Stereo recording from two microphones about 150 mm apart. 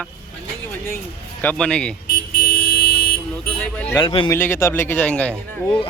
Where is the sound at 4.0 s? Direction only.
35° left (ahead or behind).